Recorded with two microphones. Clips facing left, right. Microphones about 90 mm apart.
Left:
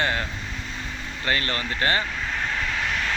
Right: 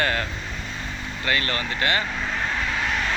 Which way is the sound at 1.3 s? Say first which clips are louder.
Right 1 dB; 30° left (ahead or behind).